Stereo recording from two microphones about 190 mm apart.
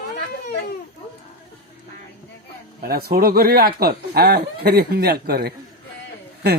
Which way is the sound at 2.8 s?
55° right (ahead or behind).